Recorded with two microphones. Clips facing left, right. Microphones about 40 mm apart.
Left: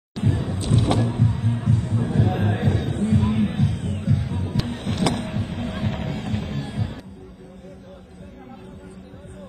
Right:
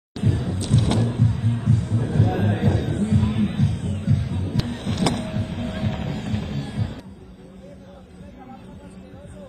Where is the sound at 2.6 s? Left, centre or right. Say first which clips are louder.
Right 1 dB; centre.